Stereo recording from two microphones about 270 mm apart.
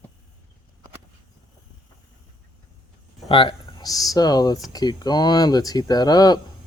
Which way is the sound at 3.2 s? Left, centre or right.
Centre.